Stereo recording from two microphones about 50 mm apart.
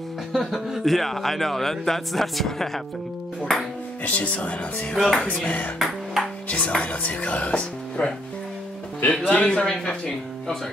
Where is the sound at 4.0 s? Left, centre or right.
Left.